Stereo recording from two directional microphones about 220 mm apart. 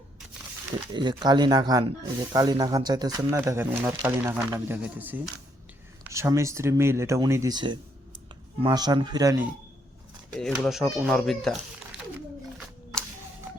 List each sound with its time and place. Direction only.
0.9 s speech: 20° right (ahead or behind)
10.3 s speech: centre (ahead or behind)